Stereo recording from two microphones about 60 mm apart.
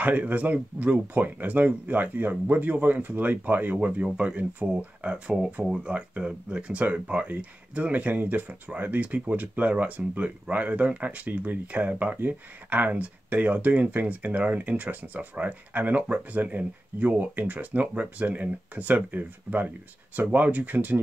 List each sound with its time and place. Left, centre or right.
0.0 s speech: right